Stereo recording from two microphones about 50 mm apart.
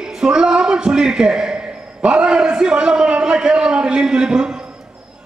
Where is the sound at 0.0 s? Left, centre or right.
Centre.